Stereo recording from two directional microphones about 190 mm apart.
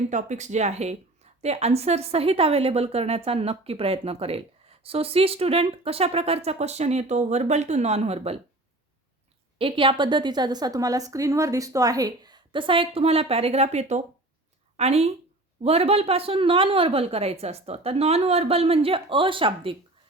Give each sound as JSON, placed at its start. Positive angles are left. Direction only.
{"t": 0.1, "sound": "speech", "side_deg": -40}
{"t": 9.6, "sound": "a woman's voice", "side_deg": -25}